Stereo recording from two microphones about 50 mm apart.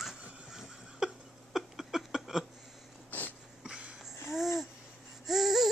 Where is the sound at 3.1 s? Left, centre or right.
Left.